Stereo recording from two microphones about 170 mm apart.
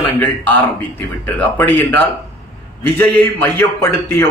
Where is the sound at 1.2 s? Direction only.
10° left (ahead or behind).